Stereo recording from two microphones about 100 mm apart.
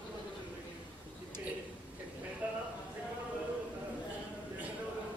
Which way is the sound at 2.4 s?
15° right (ahead or behind).